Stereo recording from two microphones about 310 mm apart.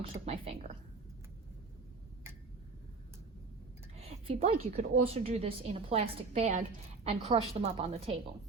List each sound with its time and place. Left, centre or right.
0.0 s a woman's voice: centre
3.9 s a woman's voice: centre